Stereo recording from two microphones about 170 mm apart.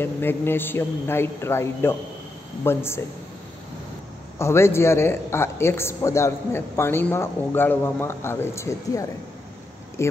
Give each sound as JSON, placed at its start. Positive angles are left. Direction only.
{"t": 0.0, "sound": "speech", "side_deg": 10}
{"t": 4.4, "sound": "speech", "side_deg": 15}